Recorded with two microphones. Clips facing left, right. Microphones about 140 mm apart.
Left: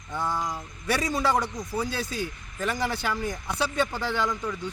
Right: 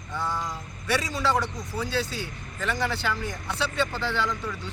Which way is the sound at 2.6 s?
10° left (ahead or behind).